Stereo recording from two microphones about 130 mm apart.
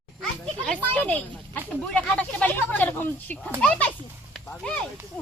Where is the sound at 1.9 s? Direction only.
10° left (ahead or behind).